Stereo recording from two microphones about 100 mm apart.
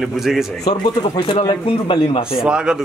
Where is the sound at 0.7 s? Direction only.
55° left (ahead or behind).